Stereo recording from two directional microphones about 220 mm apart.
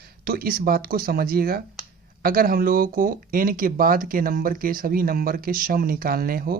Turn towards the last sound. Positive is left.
turn(degrees=-40)  # may be behind; listen again after turning